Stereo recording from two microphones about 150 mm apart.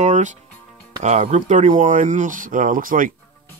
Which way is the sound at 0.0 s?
55° right (ahead or behind).